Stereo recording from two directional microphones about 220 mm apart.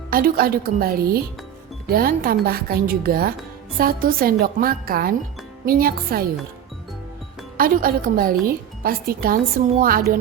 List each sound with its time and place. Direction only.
0.1 s speech: 40° right (ahead or behind)
7.5 s speech: 40° right (ahead or behind)